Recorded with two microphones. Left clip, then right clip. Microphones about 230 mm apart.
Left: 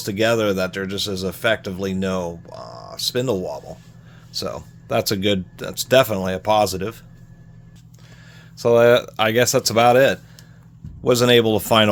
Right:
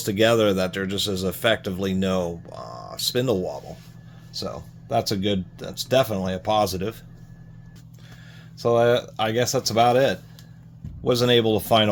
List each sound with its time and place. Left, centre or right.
0.0 s speech: centre
4.3 s speech: left
8.5 s speech: left